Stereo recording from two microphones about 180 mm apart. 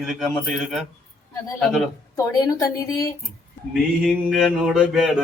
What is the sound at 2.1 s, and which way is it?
Speech, 20° left (ahead or behind).